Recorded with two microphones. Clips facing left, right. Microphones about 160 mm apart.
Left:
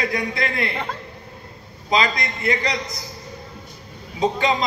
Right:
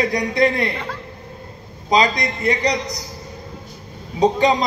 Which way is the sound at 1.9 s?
35° right (ahead or behind).